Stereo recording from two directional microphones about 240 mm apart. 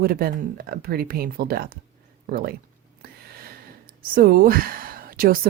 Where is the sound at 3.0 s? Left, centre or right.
Right.